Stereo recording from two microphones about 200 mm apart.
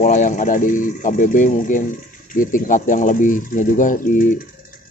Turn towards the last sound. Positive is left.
turn(degrees=40)  # may be behind; listen again after turning